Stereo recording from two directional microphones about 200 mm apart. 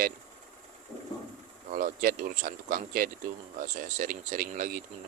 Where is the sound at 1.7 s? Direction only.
45° right (ahead or behind).